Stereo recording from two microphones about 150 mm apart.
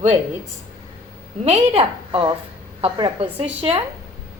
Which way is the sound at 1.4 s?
40° right (ahead or behind).